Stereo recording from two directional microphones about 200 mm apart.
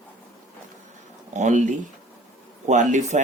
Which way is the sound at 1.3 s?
35° right (ahead or behind).